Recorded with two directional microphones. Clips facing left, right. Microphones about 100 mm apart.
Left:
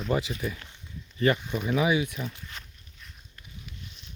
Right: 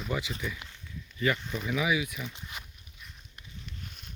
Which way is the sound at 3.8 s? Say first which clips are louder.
Right 1 dB; 50° right (ahead or behind).